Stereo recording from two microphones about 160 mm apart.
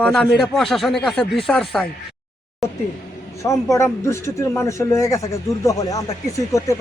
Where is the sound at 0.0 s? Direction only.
5° left (ahead or behind).